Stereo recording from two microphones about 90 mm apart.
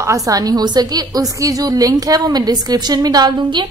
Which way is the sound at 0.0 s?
40° right (ahead or behind).